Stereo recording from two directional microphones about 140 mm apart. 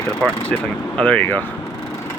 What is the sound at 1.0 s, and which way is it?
Speech, 10° left (ahead or behind).